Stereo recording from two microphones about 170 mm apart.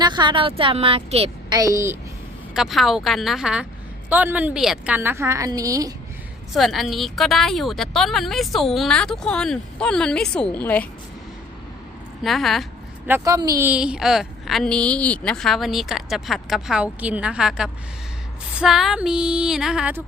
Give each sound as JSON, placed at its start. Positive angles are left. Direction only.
{"t": 0.0, "sound": "a woman's voice", "side_deg": -25}
{"t": 1.5, "sound": "a woman's voice", "side_deg": -20}
{"t": 2.6, "sound": "a woman's voice", "side_deg": 0}
{"t": 6.5, "sound": "a woman's voice", "side_deg": 0}
{"t": 12.2, "sound": "a woman's voice", "side_deg": 0}
{"t": 13.1, "sound": "a woman's voice", "side_deg": -15}